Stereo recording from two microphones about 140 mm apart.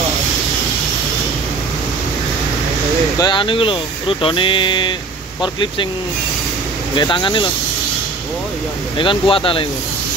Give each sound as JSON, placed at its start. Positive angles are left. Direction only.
{"t": 3.2, "sound": "speech", "side_deg": 35}
{"t": 7.0, "sound": "speech", "side_deg": 35}
{"t": 8.9, "sound": "speech", "side_deg": 35}